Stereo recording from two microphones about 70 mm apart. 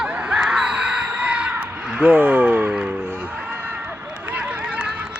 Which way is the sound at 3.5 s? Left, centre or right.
Right.